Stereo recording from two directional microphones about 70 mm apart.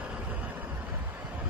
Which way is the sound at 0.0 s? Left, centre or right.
Centre.